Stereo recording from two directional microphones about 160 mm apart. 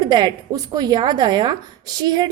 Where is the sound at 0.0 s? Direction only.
25° right (ahead or behind).